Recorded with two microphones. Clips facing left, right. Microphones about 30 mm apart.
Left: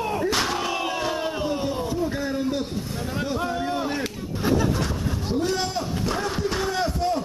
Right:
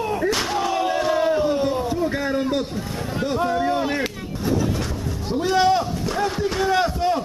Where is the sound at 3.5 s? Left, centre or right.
Centre.